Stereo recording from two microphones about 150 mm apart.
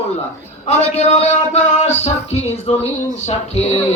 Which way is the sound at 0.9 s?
50° left (ahead or behind).